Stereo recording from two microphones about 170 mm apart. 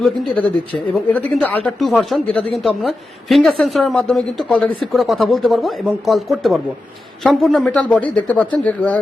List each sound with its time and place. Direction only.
0.0 s a woman's voice: 10° left (ahead or behind)